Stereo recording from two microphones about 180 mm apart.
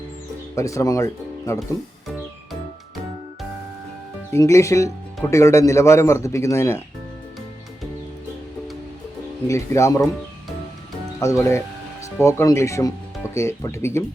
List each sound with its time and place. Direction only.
0.5 s speech: 15° left (ahead or behind)
4.3 s speech: 15° left (ahead or behind)
9.5 s speech: 15° left (ahead or behind)
11.2 s speech: 15° left (ahead or behind)